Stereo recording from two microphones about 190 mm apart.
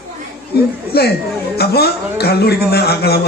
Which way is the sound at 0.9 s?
55° left (ahead or behind).